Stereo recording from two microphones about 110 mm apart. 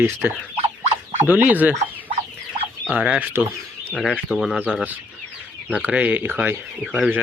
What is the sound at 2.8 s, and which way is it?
Speech, 10° right (ahead or behind).